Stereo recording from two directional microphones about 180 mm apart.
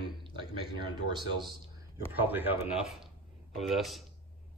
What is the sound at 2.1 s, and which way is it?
Speech, 10° right (ahead or behind).